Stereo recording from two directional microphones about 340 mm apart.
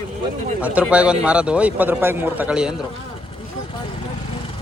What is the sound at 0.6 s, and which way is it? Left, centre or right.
A man's voice, centre.